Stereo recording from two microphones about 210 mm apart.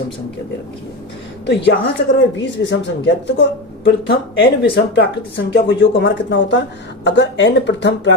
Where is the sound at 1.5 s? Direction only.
55° left (ahead or behind).